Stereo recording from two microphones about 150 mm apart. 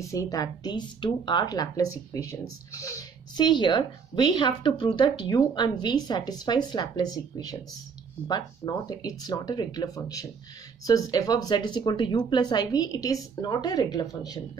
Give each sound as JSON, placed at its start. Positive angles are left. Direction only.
{"t": 0.0, "sound": "a woman's voice", "side_deg": 20}